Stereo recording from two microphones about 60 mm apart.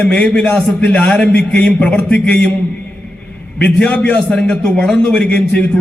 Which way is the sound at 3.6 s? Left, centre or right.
Left.